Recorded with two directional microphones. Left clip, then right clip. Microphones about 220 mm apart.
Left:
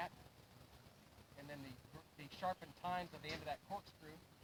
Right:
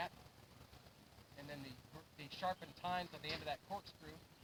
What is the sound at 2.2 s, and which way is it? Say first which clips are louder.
Speech: right 1 dB; 40° right (ahead or behind).